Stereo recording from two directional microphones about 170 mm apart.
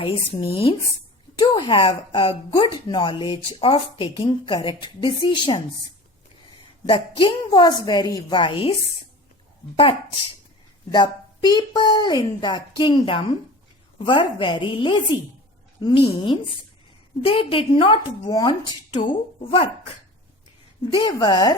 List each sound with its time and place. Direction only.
0.0 s a woman's voice: 30° left (ahead or behind)
6.8 s speech: 30° left (ahead or behind)
10.9 s a woman's voice: 25° left (ahead or behind)
20.9 s speech: 30° left (ahead or behind)